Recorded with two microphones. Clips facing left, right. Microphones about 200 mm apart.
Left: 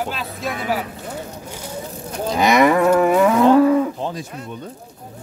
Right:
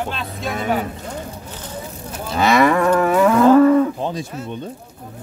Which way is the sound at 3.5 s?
10° left (ahead or behind).